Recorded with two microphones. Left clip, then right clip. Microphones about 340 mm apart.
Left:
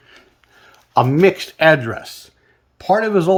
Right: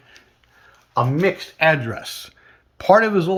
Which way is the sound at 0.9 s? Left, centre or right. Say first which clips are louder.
Left 6 dB; left.